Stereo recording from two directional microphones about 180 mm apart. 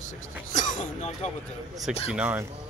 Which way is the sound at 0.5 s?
45° left (ahead or behind).